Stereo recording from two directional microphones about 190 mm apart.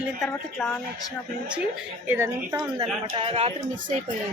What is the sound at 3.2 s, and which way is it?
Speech, 30° right (ahead or behind).